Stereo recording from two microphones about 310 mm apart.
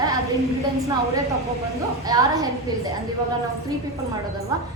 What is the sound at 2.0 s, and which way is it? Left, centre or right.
Speech, centre.